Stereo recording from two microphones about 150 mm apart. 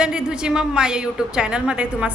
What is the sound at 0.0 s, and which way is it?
A woman's voice, 5° right (ahead or behind).